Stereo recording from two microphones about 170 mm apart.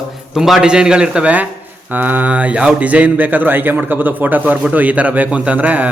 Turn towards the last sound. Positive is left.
turn(degrees=-10)  # may be behind; listen again after turning